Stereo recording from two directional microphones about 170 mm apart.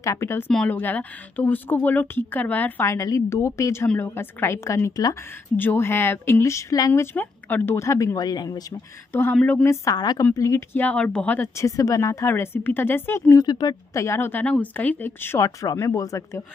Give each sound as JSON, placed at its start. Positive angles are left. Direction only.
{"t": 0.0, "sound": "speech", "side_deg": 15}